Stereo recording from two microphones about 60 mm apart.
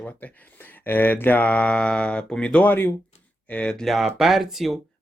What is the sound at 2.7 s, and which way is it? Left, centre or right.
Speech, left.